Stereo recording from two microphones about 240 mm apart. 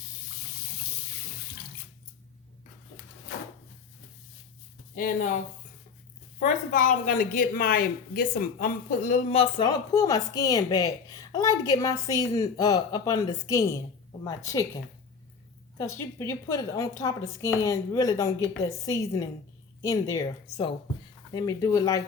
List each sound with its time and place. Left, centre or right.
4.9 s speech: left
6.4 s a woman's voice: left; by 14.7 s centre
15.8 s speech: centre